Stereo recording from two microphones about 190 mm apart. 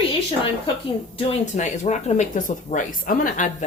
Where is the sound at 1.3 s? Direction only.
40° left (ahead or behind).